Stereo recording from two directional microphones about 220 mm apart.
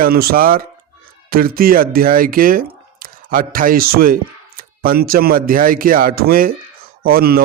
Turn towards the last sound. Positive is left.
turn(degrees=-45)  # may be behind; listen again after turning